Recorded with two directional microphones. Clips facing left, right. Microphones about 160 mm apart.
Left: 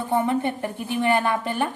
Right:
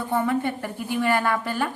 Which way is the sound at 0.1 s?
20° left (ahead or behind).